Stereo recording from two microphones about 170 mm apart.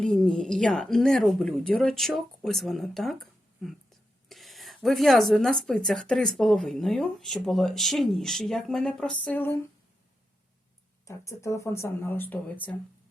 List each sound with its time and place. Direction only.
0.0 s speech: 5° left (ahead or behind)
11.0 s speech: 15° left (ahead or behind)